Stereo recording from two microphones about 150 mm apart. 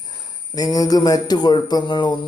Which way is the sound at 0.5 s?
25° left (ahead or behind).